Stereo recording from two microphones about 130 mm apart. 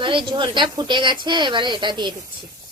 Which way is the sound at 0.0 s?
40° right (ahead or behind).